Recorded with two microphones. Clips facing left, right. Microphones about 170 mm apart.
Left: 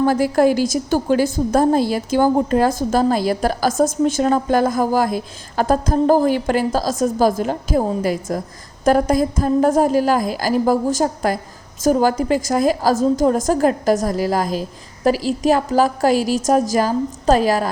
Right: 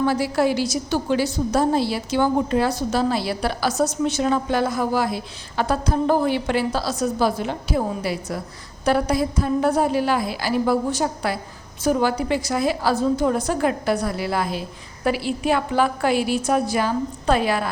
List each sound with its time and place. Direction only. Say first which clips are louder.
0.0 s a woman's voice: left 5 dB; 45° left (ahead or behind)